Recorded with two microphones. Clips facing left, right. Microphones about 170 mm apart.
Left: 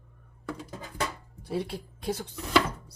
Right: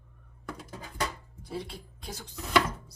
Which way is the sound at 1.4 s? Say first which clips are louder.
Left 6 dB; 65° left (ahead or behind).